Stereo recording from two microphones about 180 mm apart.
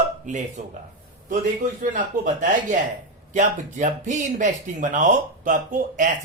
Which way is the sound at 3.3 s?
45° right (ahead or behind).